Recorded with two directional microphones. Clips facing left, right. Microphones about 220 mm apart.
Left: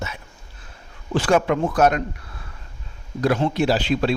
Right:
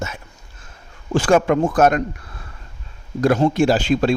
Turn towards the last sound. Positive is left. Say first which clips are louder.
# right 4 dB
turn(degrees=-45)  # may be behind; listen again after turning